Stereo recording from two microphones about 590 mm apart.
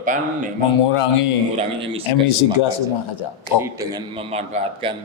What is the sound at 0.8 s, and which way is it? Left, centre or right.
Speech, left.